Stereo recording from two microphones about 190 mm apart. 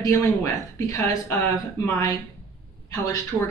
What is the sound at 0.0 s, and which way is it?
Speech, 15° left (ahead or behind).